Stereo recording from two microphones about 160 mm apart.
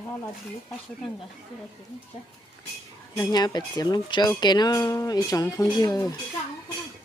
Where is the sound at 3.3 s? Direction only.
25° left (ahead or behind).